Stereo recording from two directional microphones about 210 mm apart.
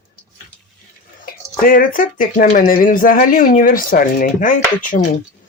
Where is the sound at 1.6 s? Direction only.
40° left (ahead or behind).